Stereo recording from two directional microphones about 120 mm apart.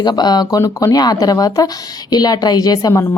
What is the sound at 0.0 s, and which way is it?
A woman's voice, 35° left (ahead or behind).